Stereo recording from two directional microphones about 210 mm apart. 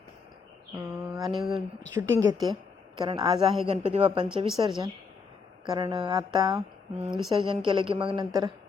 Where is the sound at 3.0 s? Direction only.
25° right (ahead or behind).